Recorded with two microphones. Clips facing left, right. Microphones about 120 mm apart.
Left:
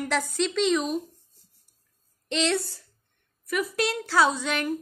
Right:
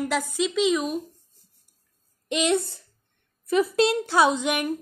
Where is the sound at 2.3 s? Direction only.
15° right (ahead or behind).